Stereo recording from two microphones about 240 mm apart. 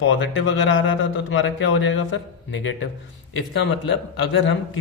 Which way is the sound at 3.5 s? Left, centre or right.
Left.